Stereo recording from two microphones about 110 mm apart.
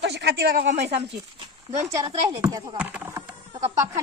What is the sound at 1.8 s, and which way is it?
Child singing, 35° right (ahead or behind).